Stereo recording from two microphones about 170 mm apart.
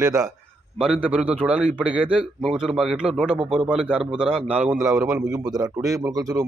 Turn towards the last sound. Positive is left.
turn(degrees=-20)  # may be behind; listen again after turning